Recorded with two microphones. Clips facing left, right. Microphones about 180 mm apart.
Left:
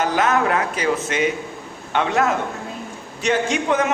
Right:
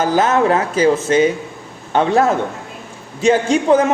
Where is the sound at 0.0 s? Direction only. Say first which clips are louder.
Right 4 dB; 30° right (ahead or behind).